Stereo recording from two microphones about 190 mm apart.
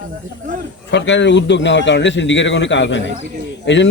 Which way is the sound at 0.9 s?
70° left (ahead or behind).